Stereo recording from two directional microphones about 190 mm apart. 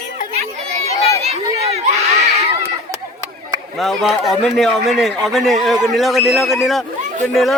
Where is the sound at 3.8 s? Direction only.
Centre (ahead or behind).